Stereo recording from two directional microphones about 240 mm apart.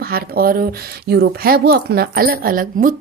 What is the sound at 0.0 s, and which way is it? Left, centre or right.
Speech, right.